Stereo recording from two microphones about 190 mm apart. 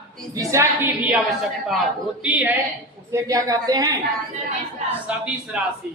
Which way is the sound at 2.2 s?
5° right (ahead or behind).